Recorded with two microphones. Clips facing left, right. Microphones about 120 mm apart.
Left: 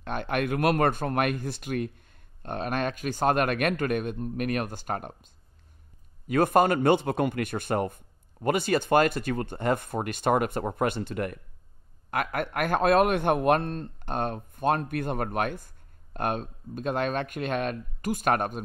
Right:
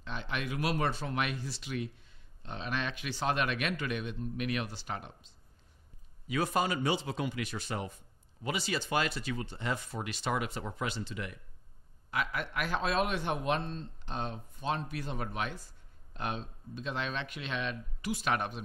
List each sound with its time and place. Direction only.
0.0 s a man's voice: 55° left (ahead or behind)